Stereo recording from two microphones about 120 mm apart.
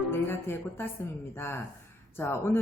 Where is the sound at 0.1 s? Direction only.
20° left (ahead or behind).